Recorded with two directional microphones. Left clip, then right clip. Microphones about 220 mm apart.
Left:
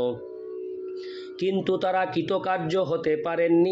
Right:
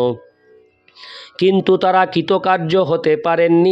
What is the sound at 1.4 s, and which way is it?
A man's voice, 50° right (ahead or behind).